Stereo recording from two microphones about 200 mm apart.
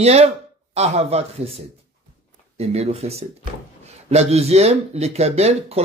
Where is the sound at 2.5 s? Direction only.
30° right (ahead or behind).